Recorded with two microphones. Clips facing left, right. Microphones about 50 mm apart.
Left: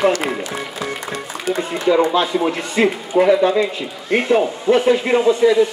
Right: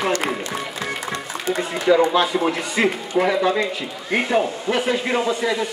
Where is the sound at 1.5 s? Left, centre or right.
Centre.